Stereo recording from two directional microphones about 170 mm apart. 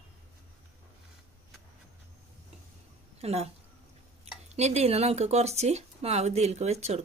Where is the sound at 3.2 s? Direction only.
40° right (ahead or behind).